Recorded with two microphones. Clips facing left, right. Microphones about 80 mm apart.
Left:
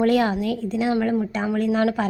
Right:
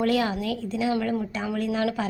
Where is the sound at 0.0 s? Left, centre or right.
Left.